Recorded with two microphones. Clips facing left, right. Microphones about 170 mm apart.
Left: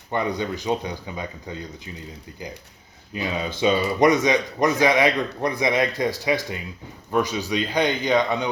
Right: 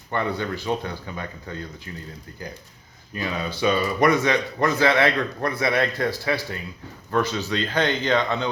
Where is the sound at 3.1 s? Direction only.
15° left (ahead or behind).